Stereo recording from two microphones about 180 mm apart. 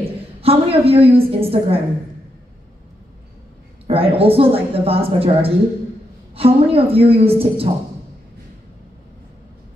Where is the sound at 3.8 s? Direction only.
30° right (ahead or behind).